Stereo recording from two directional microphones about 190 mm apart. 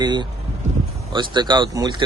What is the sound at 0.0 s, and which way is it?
Speech, 25° right (ahead or behind).